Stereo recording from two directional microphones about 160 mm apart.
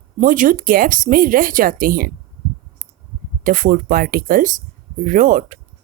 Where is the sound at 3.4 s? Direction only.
60° right (ahead or behind).